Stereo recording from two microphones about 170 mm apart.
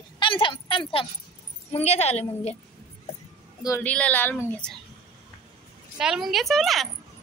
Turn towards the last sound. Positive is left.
turn(degrees=0)  # may be behind; listen again after turning